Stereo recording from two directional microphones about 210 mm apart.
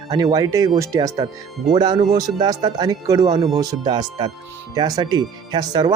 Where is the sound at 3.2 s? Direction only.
30° right (ahead or behind).